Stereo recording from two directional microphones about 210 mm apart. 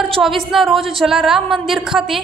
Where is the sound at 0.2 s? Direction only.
Centre (ahead or behind).